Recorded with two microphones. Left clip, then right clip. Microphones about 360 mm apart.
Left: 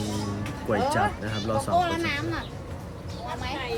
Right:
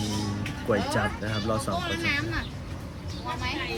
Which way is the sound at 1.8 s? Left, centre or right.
Left.